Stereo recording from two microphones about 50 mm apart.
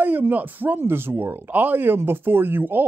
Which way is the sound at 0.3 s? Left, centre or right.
Right.